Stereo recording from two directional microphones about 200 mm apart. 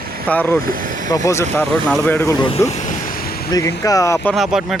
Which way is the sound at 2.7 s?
35° left (ahead or behind).